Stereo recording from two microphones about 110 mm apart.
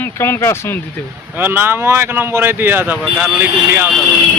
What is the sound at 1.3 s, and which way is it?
Speech, 20° right (ahead or behind).